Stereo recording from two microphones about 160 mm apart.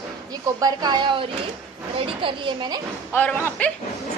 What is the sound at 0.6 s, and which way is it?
A woman's voice, 25° right (ahead or behind).